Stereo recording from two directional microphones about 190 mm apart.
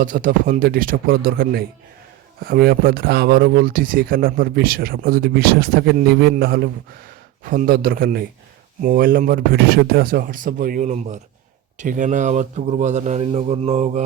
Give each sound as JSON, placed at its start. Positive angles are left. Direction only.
{"t": 0.0, "sound": "a man's voice", "side_deg": -45}